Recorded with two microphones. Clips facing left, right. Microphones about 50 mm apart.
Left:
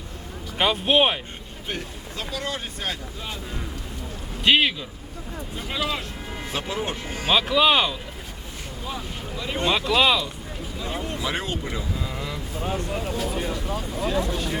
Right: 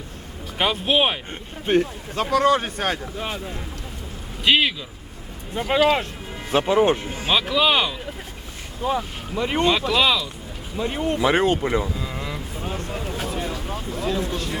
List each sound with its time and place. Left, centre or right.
0.6 s speech: centre
1.6 s speech: right
4.4 s speech: centre
5.5 s speech: right
7.3 s speech: centre
8.9 s speech: right
9.6 s speech: centre
10.8 s speech: right
11.9 s vehicle: centre
12.6 s speech: centre